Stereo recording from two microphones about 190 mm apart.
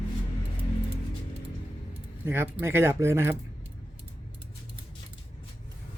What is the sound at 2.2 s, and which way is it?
Speech, 10° right (ahead or behind).